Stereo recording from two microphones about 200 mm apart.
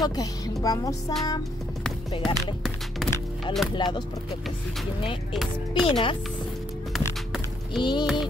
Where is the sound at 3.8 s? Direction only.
20° left (ahead or behind).